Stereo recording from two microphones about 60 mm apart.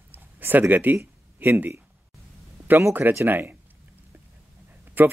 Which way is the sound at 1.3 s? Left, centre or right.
Right.